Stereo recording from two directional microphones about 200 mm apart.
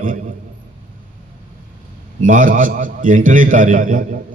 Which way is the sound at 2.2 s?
40° right (ahead or behind).